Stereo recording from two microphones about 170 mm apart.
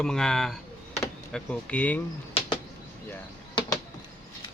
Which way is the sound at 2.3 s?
30° left (ahead or behind).